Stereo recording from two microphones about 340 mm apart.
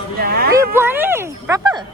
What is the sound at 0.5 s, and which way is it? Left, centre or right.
Speech, centre.